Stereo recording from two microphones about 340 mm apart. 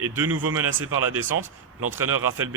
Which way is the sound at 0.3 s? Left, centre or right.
Right.